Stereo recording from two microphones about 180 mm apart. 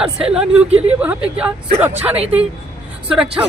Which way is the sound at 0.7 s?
35° right (ahead or behind).